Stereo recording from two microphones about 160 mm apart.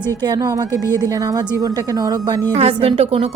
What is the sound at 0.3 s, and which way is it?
A woman's voice, 25° right (ahead or behind).